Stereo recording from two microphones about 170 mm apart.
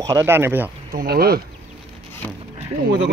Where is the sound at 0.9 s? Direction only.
60° right (ahead or behind).